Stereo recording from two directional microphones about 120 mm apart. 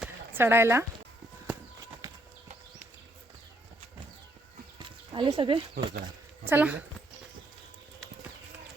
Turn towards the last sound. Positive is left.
turn(degrees=-15)  # may be behind; listen again after turning